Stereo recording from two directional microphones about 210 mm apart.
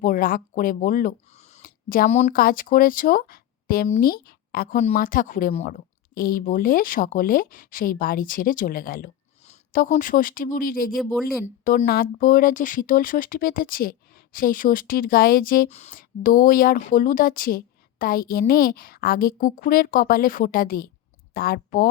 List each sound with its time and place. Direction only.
0.0 s a woman's voice: 40° left (ahead or behind)
10.9 s speech: centre (ahead or behind)
11.4 s a woman's voice: 40° left (ahead or behind)